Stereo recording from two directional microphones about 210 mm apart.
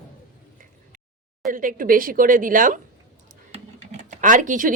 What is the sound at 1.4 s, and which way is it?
Speech, 40° right (ahead or behind).